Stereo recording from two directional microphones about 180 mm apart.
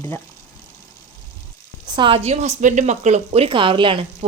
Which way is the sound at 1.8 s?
25° right (ahead or behind).